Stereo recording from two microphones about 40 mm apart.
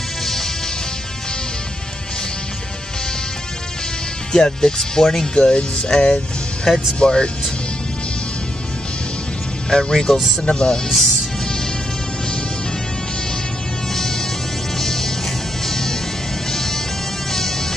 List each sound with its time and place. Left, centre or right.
0.2 s music: centre
4.3 s music: centre
7.0 s speech: left
9.7 s speech: centre
10.9 s speech: centre
14.8 s music: centre